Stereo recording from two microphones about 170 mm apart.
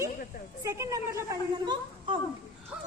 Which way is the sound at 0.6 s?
20° right (ahead or behind).